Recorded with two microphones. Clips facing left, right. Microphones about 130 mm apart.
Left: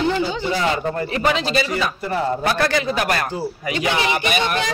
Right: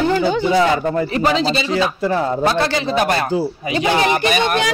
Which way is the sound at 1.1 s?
35° right (ahead or behind).